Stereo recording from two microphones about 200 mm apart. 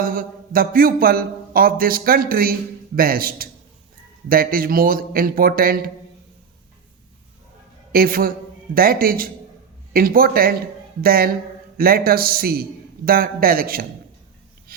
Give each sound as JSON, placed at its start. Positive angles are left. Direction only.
{"t": 0.0, "sound": "speech", "side_deg": -45}
{"t": 7.9, "sound": "speech", "side_deg": -45}